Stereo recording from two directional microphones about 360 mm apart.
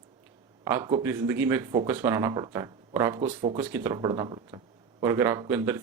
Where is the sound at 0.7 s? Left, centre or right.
Centre.